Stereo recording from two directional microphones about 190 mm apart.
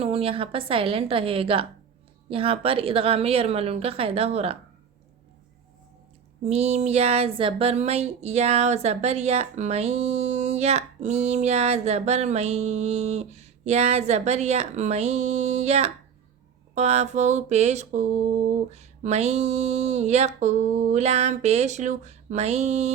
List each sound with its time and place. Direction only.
0.0 s a woman's voice: 30° right (ahead or behind)
6.4 s speech: 35° right (ahead or behind)